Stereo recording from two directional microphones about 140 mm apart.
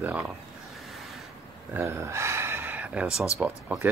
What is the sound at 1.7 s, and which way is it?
Speech, 20° right (ahead or behind).